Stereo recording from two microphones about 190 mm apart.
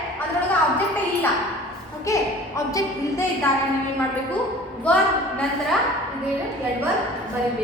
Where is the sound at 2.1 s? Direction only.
15° left (ahead or behind).